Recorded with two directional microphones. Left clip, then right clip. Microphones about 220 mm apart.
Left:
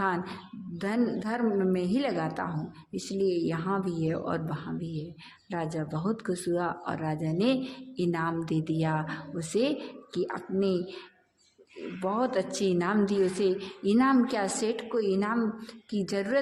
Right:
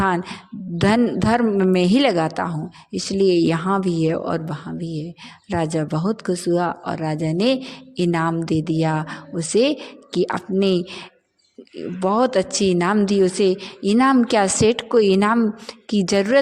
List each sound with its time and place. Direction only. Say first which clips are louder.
0.0 s a woman's voice: right 9 dB; 35° right (ahead or behind)